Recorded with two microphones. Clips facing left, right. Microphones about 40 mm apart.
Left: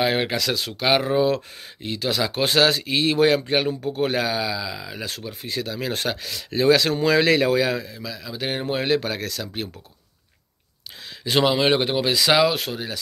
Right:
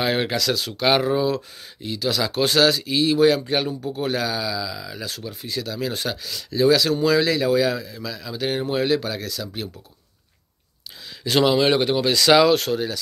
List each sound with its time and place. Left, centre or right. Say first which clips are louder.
0.0 s speech: even; centre
1.2 s speech: left 2 dB; left
7.6 s speech: right 1 dB; left
8.0 s speech: right 2 dB; centre; by 9.7 s left
11.2 s speech: right 1 dB; centre